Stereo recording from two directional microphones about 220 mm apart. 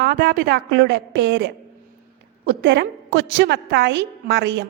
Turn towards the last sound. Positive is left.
turn(degrees=-50)  # may be behind; listen again after turning